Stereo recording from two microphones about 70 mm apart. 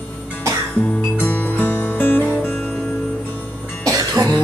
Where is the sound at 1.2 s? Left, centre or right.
Left.